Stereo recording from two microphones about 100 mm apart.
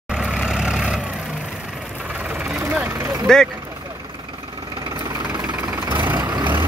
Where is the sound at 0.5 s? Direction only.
5° right (ahead or behind).